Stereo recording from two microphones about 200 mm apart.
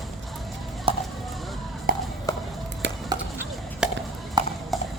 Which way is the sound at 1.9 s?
45° right (ahead or behind).